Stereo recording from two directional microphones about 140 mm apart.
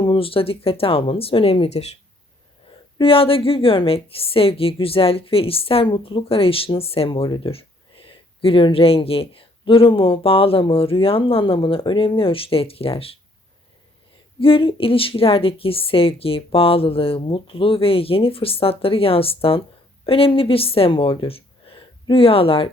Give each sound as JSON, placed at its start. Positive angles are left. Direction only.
{"t": 0.0, "sound": "a woman's voice", "side_deg": 40}
{"t": 3.0, "sound": "a woman's voice", "side_deg": 40}
{"t": 14.3, "sound": "a woman's voice", "side_deg": 40}